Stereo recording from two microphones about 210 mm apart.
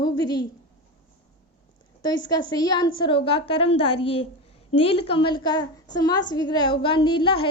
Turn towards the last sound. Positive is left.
turn(degrees=25)  # may be behind; listen again after turning